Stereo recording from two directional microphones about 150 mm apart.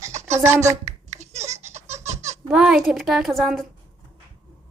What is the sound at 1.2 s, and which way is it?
Baby laughter, 45° right (ahead or behind).